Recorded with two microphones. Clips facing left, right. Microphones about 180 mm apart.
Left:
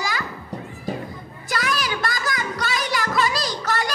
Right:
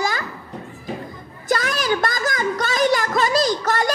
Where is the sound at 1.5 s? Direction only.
50° right (ahead or behind).